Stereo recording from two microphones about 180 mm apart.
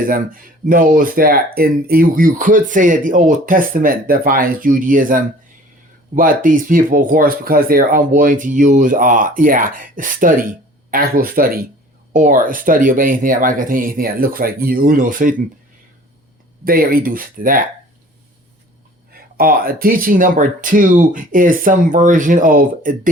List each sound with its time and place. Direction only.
0.0 s speech: 50° right (ahead or behind)
16.6 s speech: 55° right (ahead or behind)
19.4 s speech: 55° right (ahead or behind)